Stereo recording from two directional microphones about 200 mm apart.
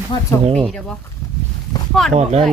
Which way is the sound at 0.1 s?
25° left (ahead or behind).